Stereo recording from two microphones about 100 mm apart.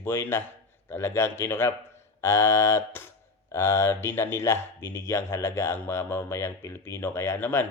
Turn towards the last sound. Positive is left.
turn(degrees=20)  # may be behind; listen again after turning